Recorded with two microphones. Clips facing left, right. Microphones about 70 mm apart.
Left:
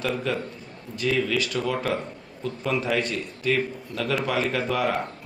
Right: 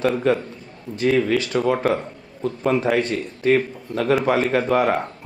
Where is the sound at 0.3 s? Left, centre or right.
Right.